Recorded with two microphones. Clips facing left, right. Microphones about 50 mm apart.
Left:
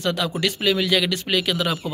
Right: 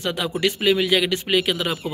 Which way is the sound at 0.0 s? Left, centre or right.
Centre.